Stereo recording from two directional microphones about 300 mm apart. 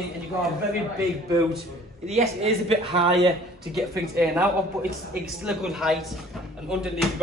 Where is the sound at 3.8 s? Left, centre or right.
Centre.